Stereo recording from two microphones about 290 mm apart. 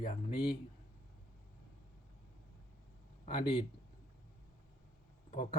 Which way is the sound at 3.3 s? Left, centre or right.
Centre.